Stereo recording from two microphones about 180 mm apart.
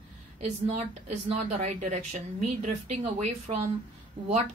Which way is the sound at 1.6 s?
40° right (ahead or behind).